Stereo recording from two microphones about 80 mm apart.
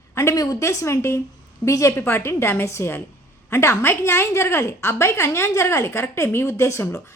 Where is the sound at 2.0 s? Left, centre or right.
Left.